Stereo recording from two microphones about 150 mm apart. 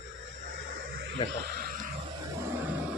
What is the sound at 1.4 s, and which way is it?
Wild animals, 90° right.